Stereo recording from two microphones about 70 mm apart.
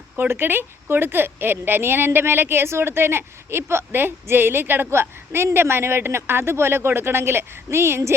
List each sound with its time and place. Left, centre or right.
0.2 s a woman's voice: right